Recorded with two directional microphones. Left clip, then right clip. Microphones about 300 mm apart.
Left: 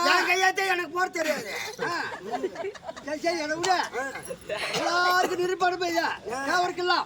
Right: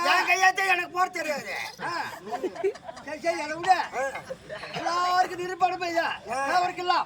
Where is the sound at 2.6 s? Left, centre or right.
Right.